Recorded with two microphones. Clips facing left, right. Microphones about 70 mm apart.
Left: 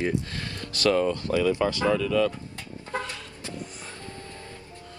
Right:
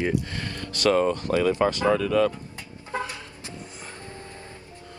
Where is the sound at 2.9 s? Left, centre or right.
Right.